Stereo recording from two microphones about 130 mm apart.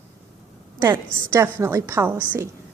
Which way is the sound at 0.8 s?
20° right (ahead or behind).